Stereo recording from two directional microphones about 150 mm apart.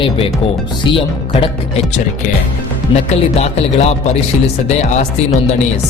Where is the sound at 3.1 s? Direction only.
45° left (ahead or behind).